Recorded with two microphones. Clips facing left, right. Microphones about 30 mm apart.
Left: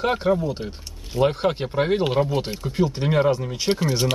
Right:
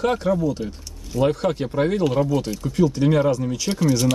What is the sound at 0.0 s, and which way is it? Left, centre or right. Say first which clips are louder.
Speech: right 1 dB; left.